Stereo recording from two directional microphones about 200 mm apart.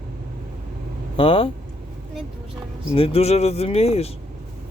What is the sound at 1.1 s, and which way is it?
Speech, 25° left (ahead or behind).